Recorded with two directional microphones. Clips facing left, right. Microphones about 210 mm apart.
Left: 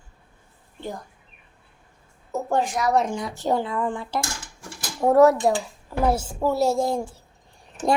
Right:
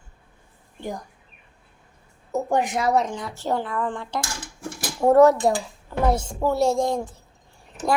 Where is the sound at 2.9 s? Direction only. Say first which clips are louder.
Left 1 dB; 10° left (ahead or behind).